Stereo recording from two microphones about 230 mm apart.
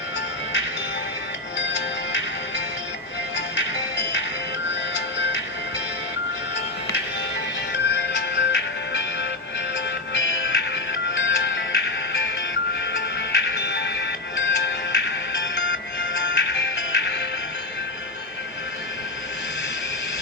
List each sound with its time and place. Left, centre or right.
1.5 s music: left
3.3 s music: left
7.7 s music: left